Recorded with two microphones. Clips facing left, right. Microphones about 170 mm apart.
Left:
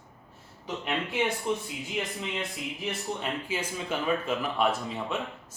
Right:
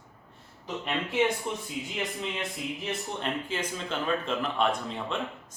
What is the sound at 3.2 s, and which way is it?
Speech, 10° left (ahead or behind).